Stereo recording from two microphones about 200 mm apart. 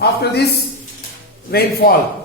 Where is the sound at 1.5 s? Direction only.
50° left (ahead or behind).